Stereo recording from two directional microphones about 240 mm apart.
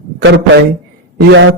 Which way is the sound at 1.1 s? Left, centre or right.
Right.